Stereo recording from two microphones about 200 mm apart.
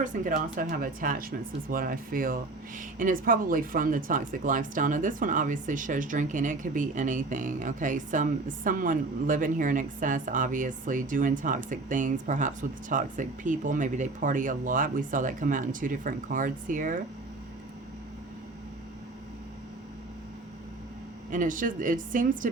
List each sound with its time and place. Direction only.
0.0 s speech: 40° right (ahead or behind)
21.2 s speech: 40° right (ahead or behind)